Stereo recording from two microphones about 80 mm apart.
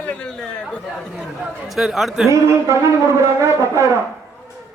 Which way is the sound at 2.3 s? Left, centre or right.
Right.